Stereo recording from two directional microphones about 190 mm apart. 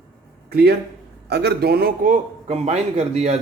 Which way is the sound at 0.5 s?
55° right (ahead or behind).